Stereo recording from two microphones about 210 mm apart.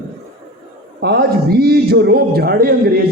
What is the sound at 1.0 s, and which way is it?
A man's voice, 50° right (ahead or behind).